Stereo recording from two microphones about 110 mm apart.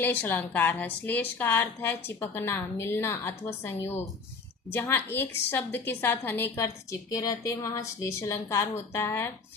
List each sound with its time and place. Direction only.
0.0 s a woman's voice: 15° left (ahead or behind)
7.1 s a woman's voice: 30° left (ahead or behind)